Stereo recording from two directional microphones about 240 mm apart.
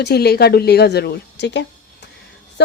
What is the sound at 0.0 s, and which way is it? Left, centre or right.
A woman's voice, left.